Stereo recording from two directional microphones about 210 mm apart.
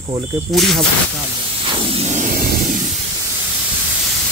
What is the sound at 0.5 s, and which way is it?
Speech, centre (ahead or behind).